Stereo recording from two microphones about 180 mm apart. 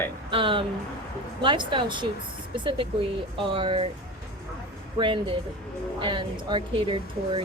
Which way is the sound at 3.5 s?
30° right (ahead or behind).